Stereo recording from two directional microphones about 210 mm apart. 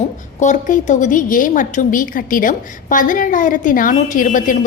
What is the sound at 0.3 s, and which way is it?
A woman's voice, 35° left (ahead or behind).